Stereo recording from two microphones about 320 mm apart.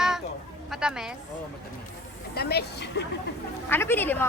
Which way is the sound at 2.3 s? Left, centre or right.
Left.